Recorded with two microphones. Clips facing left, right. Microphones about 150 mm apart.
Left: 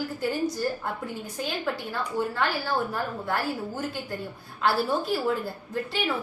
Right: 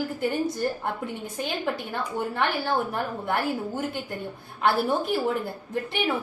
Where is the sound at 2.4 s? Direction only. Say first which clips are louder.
Right 5 dB; 20° right (ahead or behind).